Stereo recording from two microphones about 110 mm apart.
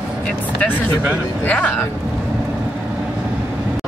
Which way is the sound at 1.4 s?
15° left (ahead or behind).